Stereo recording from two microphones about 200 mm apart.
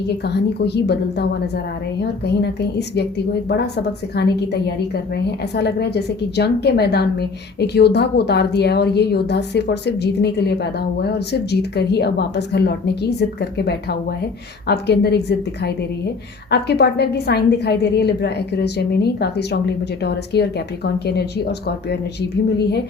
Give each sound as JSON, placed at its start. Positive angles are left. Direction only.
{"t": 0.1, "sound": "a woman's voice", "side_deg": 55}
{"t": 4.1, "sound": "a woman's voice", "side_deg": 55}